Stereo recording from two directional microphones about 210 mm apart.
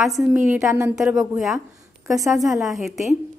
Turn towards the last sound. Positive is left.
turn(degrees=0)  # may be behind; listen again after turning